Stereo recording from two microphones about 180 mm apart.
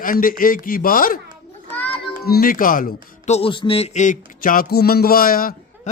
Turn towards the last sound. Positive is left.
turn(degrees=55)  # may be behind; listen again after turning